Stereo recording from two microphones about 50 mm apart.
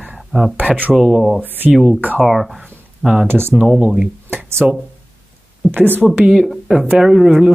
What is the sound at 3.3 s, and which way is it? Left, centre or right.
Speech, right.